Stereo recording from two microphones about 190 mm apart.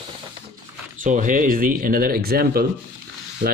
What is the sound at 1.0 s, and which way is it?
Speech, 40° right (ahead or behind).